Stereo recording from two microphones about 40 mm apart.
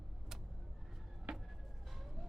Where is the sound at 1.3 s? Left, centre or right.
Right.